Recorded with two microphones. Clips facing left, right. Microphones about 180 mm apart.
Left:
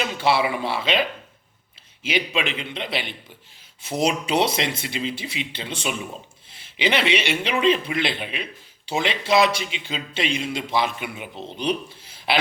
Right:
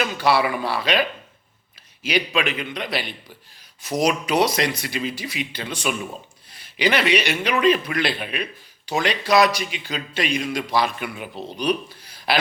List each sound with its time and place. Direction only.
0.0 s speech: 25° left (ahead or behind)
2.0 s speech: 20° left (ahead or behind)